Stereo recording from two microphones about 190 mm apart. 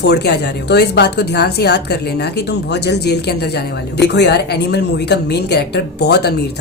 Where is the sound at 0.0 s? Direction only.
60° left (ahead or behind).